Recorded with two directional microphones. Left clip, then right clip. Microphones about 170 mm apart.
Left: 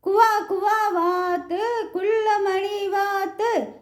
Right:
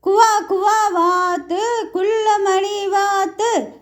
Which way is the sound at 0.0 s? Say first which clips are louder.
Right 5 dB; 25° right (ahead or behind).